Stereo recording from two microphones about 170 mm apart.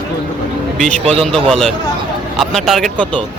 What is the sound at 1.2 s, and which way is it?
A man's voice, 5° left (ahead or behind).